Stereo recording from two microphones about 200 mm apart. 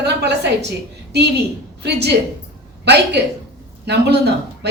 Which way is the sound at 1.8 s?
55° right (ahead or behind).